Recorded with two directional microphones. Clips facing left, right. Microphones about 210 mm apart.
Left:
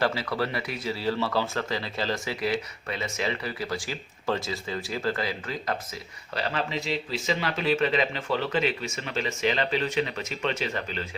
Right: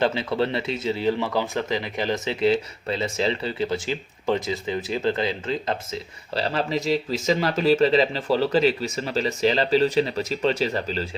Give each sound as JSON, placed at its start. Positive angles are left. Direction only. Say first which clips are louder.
{"t": 0.0, "sound": "speech", "louder": "right 4 dB", "side_deg": -20}